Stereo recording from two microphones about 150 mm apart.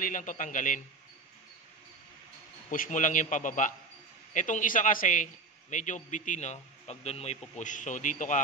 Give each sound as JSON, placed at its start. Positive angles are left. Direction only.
{"t": 0.0, "sound": "a man's voice", "side_deg": 60}
{"t": 2.7, "sound": "a man's voice", "side_deg": 60}